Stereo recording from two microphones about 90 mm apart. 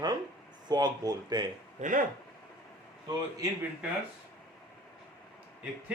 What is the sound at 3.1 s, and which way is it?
Speech, 45° right (ahead or behind).